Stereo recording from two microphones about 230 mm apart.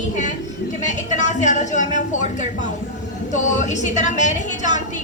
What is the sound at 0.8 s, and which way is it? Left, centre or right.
Speech, left.